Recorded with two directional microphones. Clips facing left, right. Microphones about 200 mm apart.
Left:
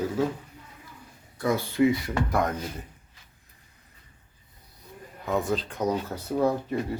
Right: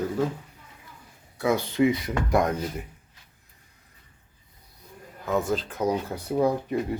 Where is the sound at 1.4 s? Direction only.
10° right (ahead or behind).